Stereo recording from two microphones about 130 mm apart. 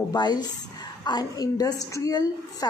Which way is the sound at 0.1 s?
30° left (ahead or behind).